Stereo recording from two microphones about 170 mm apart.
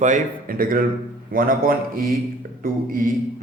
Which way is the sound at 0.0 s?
50° right (ahead or behind).